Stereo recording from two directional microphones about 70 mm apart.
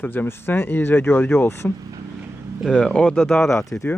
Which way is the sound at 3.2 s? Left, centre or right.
Centre.